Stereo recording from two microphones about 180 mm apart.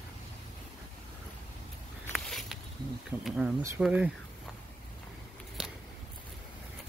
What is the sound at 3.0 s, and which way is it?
Speech, 5° right (ahead or behind).